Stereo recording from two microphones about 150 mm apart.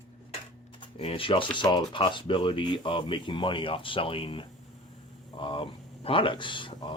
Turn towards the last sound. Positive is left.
turn(degrees=35)  # may be behind; listen again after turning